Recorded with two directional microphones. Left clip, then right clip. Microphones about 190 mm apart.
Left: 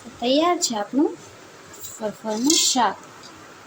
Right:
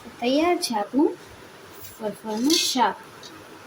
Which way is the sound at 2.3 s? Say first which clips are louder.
Left 2 dB; 5° left (ahead or behind).